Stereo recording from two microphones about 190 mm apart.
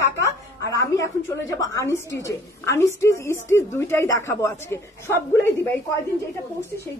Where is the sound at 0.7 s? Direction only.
15° left (ahead or behind).